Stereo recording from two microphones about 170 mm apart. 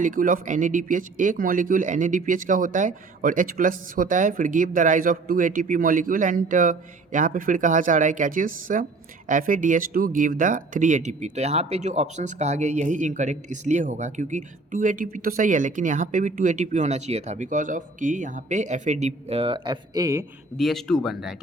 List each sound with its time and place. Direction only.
0.0 s speech: 55° right (ahead or behind); by 20.2 s 20° right (ahead or behind)
20.6 s speech: centre (ahead or behind)